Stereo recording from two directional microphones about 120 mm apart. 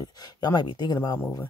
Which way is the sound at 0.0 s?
35° left (ahead or behind).